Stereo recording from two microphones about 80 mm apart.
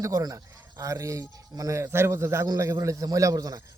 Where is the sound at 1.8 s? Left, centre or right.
Right.